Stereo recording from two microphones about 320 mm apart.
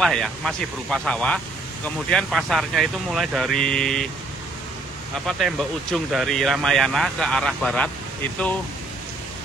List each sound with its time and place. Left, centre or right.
0.0 s speech: centre
5.2 s speech: centre